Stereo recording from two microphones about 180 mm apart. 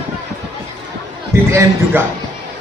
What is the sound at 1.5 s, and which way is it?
Speech, 15° right (ahead or behind).